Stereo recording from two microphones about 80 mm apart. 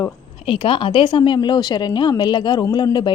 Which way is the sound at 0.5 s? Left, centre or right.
Left.